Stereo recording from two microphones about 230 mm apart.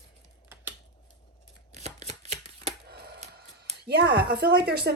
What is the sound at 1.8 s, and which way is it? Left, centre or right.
Shuffling cards, right.